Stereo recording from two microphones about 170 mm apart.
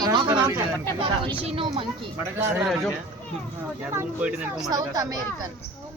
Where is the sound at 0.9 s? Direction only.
30° right (ahead or behind).